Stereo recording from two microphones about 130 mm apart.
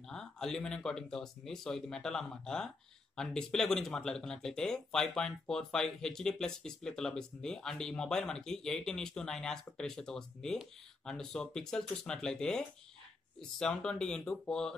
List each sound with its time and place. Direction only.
0.0 s speech: 5° left (ahead or behind)